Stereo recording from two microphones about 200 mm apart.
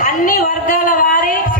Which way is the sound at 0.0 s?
40° left (ahead or behind).